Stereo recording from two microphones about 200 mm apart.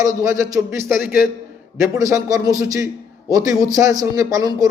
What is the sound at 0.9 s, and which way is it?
Speech, 45° left (ahead or behind).